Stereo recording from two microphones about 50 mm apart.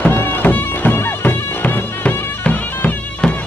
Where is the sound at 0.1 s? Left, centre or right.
Left.